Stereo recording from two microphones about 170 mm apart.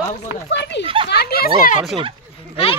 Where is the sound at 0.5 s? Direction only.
90° left.